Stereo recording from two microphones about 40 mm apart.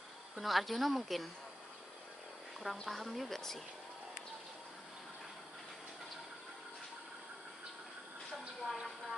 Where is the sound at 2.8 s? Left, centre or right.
Centre.